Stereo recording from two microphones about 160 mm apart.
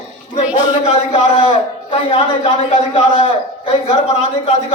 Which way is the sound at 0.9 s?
40° left (ahead or behind).